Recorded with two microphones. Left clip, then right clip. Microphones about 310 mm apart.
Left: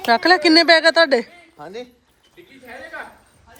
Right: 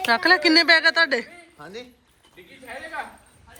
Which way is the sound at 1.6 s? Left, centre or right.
Left.